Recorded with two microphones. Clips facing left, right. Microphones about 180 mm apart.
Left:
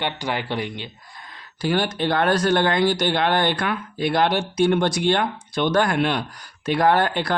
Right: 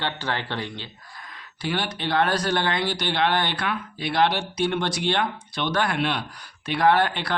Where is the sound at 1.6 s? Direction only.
45° left (ahead or behind).